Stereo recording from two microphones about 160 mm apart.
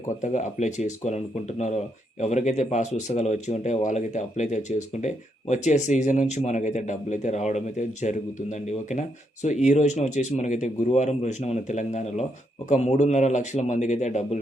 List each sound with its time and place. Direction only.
0.2 s speech: 50° left (ahead or behind)